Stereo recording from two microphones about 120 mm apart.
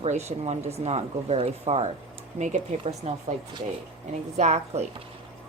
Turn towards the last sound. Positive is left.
turn(degrees=-70)  # may be behind; listen again after turning